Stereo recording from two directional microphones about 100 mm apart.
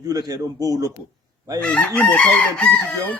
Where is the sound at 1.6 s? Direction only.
15° left (ahead or behind).